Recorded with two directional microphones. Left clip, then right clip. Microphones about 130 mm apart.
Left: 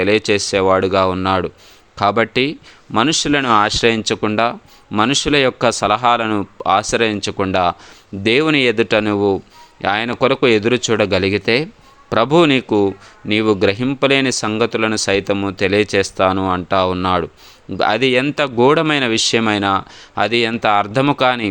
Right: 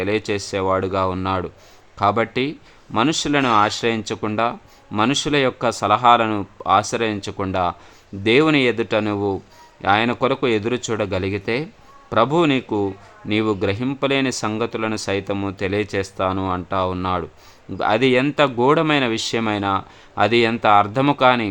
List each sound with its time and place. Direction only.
0.0 s speech: 30° left (ahead or behind)